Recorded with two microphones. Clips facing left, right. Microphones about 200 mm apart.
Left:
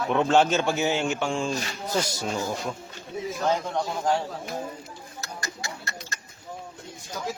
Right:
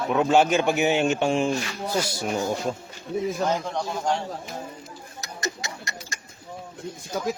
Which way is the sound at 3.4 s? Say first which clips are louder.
Even; centre (ahead or behind).